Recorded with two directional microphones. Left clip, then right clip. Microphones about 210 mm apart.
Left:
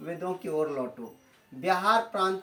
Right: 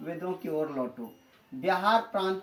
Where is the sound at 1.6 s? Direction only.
20° left (ahead or behind).